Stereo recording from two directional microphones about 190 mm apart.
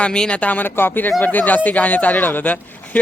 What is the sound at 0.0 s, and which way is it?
Speech, 5° left (ahead or behind).